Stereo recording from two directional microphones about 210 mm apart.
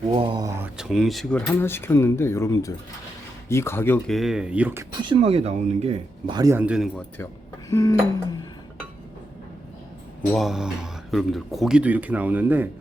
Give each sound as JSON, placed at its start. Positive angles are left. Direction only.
{"t": 0.2, "sound": "speech", "side_deg": -20}
{"t": 0.6, "sound": "speech", "side_deg": -5}
{"t": 7.7, "sound": "speech", "side_deg": 15}
{"t": 10.3, "sound": "speech", "side_deg": 0}